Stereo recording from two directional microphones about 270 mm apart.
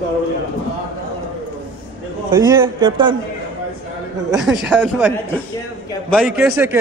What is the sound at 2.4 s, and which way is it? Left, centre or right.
Speech, centre.